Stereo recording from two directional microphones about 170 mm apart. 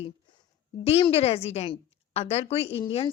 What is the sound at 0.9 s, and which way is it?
Speech, 35° left (ahead or behind).